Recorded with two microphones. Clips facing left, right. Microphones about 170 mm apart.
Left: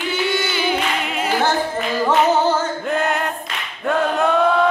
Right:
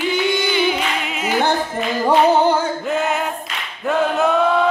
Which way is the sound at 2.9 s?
Centre (ahead or behind).